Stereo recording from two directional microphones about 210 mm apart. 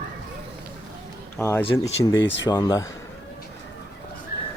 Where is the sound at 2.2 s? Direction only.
60° left (ahead or behind).